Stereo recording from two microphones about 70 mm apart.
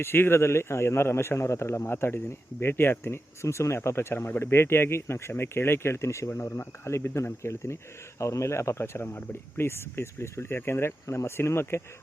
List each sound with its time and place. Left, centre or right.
0.0 s a man's voice: left